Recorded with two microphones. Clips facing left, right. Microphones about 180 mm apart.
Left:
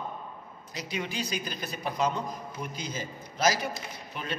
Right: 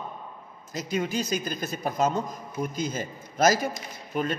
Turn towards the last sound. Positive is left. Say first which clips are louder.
# right 9 dB
turn(degrees=-45)  # may be behind; listen again after turning